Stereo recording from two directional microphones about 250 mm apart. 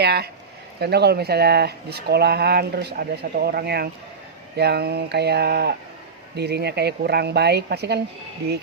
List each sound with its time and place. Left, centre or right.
0.0 s speech: right